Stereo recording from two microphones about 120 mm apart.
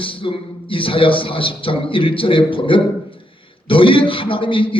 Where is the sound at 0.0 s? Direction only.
45° left (ahead or behind).